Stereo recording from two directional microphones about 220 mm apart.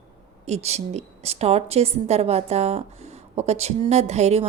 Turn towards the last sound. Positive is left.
turn(degrees=-30)  # may be behind; listen again after turning